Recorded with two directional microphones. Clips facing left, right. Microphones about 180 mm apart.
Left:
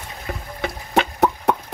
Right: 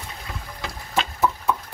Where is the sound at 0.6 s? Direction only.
65° left (ahead or behind).